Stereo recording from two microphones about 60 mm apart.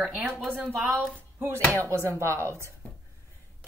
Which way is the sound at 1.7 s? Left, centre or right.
Right.